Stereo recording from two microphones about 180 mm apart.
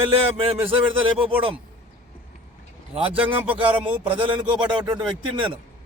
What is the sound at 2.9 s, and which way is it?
A man's voice, 30° right (ahead or behind).